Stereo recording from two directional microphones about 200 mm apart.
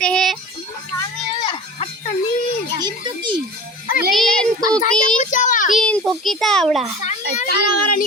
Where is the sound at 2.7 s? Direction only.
20° right (ahead or behind).